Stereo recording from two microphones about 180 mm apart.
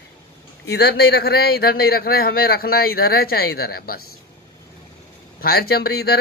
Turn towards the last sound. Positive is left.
turn(degrees=60)  # may be behind; listen again after turning